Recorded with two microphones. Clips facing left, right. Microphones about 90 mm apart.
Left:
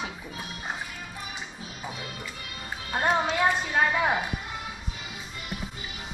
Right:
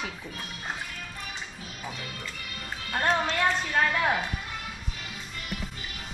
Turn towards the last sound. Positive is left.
turn(degrees=10)  # may be behind; listen again after turning